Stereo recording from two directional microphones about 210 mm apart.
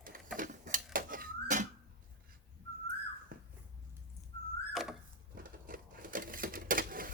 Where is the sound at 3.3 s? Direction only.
45° right (ahead or behind).